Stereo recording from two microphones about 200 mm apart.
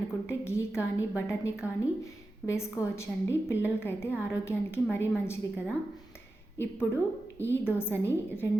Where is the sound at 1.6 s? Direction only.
5° right (ahead or behind).